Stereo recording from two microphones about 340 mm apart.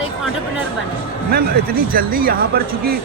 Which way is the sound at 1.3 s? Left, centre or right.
Right.